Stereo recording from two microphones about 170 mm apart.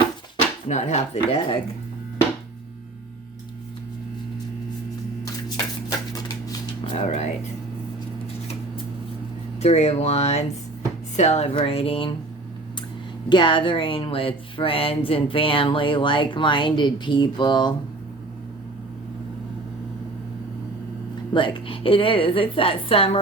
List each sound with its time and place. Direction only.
0.7 s a woman's voice: 40° left (ahead or behind)
6.5 s a sound: 30° left (ahead or behind)
7.0 s whispering: 40° left (ahead or behind)
9.6 s a woman's voice: 40° left (ahead or behind)
13.2 s speech: 30° left (ahead or behind)
21.3 s a woman's voice: 30° left (ahead or behind)